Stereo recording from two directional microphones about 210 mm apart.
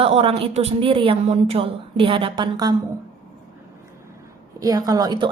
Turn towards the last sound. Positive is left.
turn(degrees=-20)  # may be behind; listen again after turning